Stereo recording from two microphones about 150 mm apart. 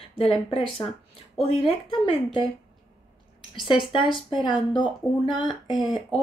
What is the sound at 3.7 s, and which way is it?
Speech, 35° left (ahead or behind).